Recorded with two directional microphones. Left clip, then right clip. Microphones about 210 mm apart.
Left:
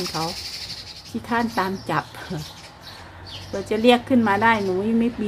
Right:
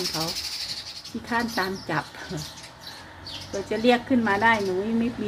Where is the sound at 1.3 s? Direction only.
25° left (ahead or behind).